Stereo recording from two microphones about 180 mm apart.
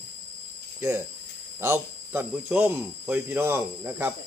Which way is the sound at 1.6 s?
10° right (ahead or behind).